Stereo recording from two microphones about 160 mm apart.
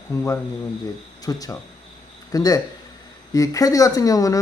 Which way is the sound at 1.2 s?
25° left (ahead or behind).